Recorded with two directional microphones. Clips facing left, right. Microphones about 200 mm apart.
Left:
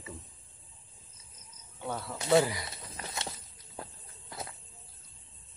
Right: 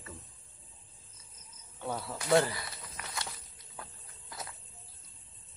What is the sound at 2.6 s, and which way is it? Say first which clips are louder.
Walk: left 3 dB; 30° left (ahead or behind).